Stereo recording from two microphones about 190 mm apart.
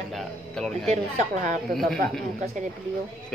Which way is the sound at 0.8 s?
40° right (ahead or behind).